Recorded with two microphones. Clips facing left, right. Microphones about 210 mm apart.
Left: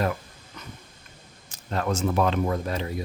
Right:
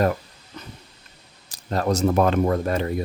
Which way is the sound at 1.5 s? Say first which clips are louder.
Right 4 dB; 35° right (ahead or behind).